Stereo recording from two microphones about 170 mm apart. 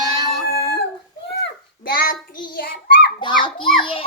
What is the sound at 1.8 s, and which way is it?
Child singing, 60° left (ahead or behind).